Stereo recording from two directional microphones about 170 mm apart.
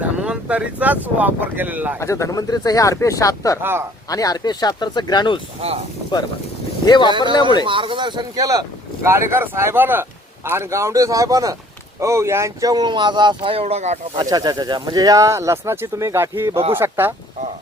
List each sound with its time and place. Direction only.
0.0 s speech: 5° right (ahead or behind)
2.0 s speech: 15° left (ahead or behind)
3.6 s speech: 15° right (ahead or behind)
4.1 s speech: 20° left (ahead or behind)
6.8 s speech: 25° left (ahead or behind)
7.6 s speech: 30° right (ahead or behind)
14.2 s speech: 25° right (ahead or behind)